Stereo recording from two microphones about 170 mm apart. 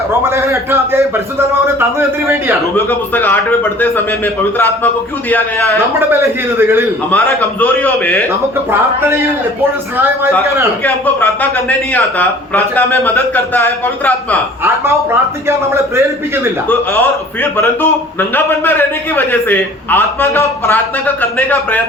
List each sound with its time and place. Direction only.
0.2 s a man's voice: 15° right (ahead or behind)
2.7 s a man's voice: 10° left (ahead or behind)
6.0 s a man's voice: 15° right (ahead or behind)
7.6 s a man's voice: 10° left (ahead or behind)
9.0 s a man's voice: 15° right (ahead or behind)
10.8 s a man's voice: 10° left (ahead or behind)
15.4 s a man's voice: 15° right (ahead or behind)
16.6 s a man's voice: 15° left (ahead or behind)